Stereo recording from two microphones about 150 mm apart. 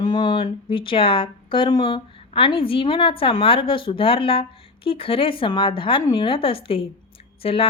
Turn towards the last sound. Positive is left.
turn(degrees=40)  # may be behind; listen again after turning